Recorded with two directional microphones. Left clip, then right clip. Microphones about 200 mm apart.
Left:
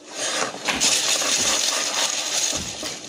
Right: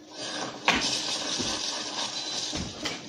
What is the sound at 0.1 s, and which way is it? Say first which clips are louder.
Wood: left 9 dB; 50° left (ahead or behind).